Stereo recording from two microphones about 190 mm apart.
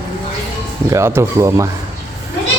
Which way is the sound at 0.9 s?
15° right (ahead or behind).